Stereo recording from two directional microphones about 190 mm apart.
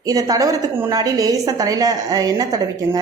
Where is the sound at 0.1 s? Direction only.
20° right (ahead or behind).